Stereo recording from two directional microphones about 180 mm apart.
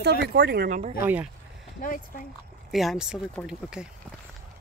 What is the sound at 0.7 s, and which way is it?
Speech, 45° right (ahead or behind).